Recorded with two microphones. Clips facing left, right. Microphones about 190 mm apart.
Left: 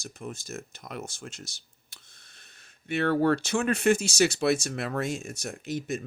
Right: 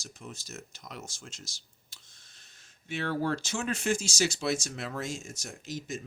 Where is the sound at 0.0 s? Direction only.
55° left (ahead or behind).